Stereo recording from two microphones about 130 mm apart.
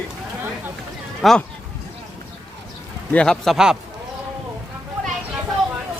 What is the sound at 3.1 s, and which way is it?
Speech, 5° left (ahead or behind).